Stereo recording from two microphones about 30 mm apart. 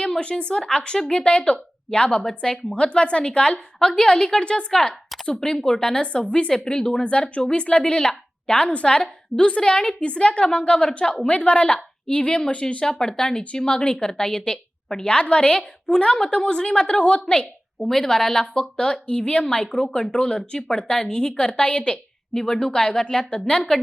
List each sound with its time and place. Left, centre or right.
0.2 s a woman's voice: left
4.4 s a woman's voice: left
5.4 s a woman's voice: centre
5.9 s a woman's voice: left
10.1 s a woman's voice: left
12.8 s a woman's voice: centre; by 17.4 s left
17.8 s a woman's voice: centre
18.8 s a woman's voice: left
22.4 s a woman's voice: centre